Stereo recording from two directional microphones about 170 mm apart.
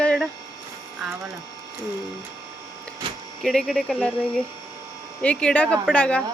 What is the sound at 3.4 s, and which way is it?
Speech, centre (ahead or behind).